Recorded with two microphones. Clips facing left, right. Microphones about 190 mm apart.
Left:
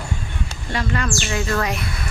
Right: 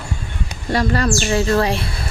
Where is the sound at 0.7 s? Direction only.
40° right (ahead or behind).